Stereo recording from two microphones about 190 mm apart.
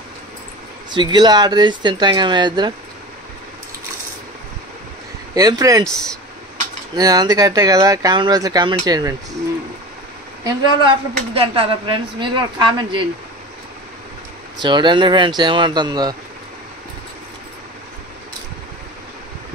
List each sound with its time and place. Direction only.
0.8 s a woman's voice: 25° right (ahead or behind)
5.3 s a woman's voice: 20° right (ahead or behind)
7.0 s a woman's voice: 20° right (ahead or behind)
10.4 s a woman's voice: 25° right (ahead or behind)
14.6 s a woman's voice: 25° right (ahead or behind)